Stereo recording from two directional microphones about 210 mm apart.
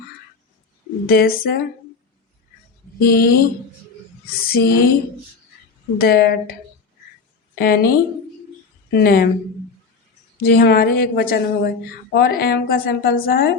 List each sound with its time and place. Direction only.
1.0 s speech: 45° left (ahead or behind)
3.0 s speech: 45° left (ahead or behind)
4.4 s speech: 45° left (ahead or behind)
6.0 s speech: 45° left (ahead or behind)
7.6 s speech: 45° left (ahead or behind)
9.0 s speech: 45° left (ahead or behind)
10.3 s speech: 45° left (ahead or behind)